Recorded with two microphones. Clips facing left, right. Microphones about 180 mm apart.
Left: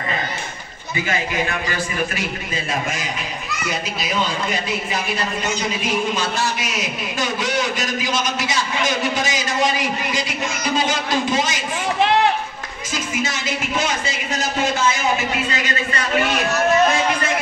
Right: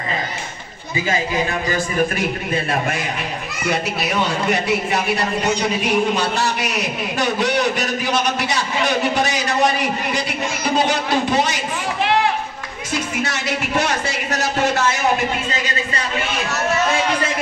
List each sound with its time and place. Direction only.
1.0 s a man's voice: 30° right (ahead or behind)
2.1 s a man's voice: 60° right (ahead or behind)
12.9 s a man's voice: 65° right (ahead or behind)